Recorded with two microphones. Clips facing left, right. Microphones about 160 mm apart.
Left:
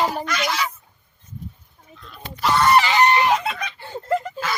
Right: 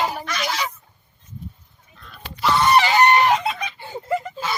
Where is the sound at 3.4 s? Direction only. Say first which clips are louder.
Right 2 dB; 5° right (ahead or behind).